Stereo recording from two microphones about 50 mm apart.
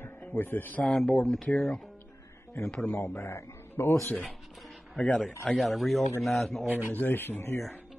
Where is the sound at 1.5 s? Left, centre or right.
Centre.